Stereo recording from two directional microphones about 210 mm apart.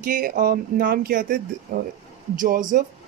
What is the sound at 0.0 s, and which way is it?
Speech, 40° right (ahead or behind).